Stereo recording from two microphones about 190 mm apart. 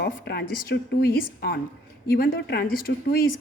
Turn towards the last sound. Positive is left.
turn(degrees=50)  # may be behind; listen again after turning